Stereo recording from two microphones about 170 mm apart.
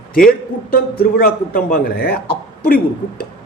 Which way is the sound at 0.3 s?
60° left (ahead or behind).